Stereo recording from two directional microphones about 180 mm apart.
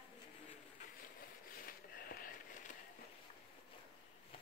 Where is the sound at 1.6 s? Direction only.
55° left (ahead or behind).